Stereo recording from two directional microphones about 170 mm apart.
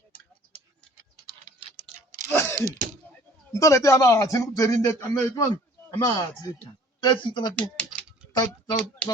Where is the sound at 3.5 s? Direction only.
20° left (ahead or behind).